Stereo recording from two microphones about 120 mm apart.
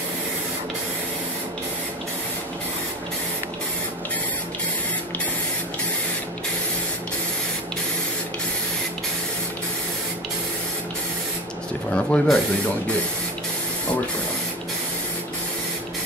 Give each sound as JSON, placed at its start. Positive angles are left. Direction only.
{"t": 11.9, "sound": "speech", "side_deg": 10}